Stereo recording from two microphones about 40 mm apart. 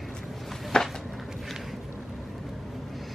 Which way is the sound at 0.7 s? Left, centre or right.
Centre.